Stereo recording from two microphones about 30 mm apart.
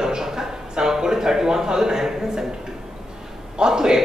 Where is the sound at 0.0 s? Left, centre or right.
Centre.